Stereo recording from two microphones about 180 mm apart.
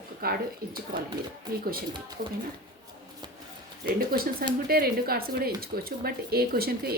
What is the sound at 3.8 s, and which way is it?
Speech, 55° right (ahead or behind).